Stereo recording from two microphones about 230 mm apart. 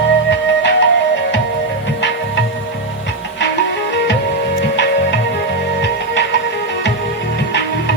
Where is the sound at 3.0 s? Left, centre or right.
Left.